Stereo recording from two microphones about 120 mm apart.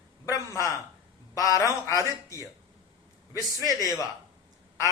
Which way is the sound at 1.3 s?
30° left (ahead or behind).